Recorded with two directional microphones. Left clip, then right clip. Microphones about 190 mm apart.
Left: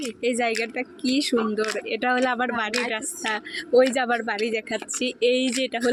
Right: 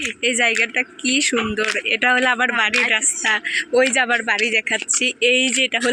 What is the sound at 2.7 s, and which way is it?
Speech, 15° left (ahead or behind).